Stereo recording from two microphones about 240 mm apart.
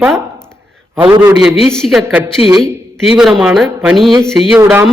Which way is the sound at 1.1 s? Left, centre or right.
Centre.